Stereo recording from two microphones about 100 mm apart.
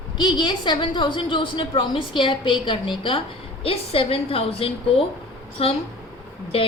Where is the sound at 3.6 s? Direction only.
70° left (ahead or behind).